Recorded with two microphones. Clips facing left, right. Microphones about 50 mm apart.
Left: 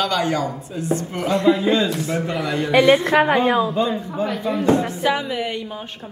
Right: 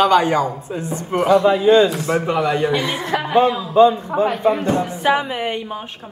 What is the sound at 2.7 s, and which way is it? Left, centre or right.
A woman's voice, left.